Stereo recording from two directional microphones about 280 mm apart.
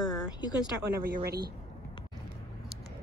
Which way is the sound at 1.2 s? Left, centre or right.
Right.